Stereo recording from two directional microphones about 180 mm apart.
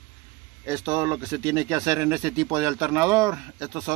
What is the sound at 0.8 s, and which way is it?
Speech, 15° right (ahead or behind).